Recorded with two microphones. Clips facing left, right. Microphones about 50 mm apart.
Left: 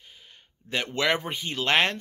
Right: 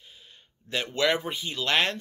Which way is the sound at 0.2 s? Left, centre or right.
Left.